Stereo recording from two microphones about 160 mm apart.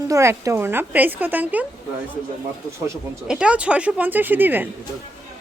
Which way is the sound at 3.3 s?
5° right (ahead or behind).